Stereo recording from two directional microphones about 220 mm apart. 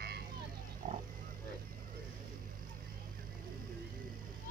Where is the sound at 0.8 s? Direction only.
35° right (ahead or behind).